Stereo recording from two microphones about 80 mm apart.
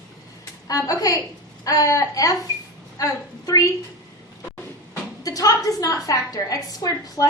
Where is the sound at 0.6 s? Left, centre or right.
Left.